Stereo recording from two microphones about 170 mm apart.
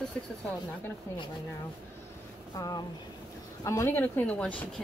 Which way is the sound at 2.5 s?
20° left (ahead or behind).